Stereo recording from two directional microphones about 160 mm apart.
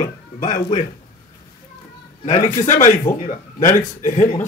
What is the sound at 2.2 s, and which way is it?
A man's voice, 50° left (ahead or behind).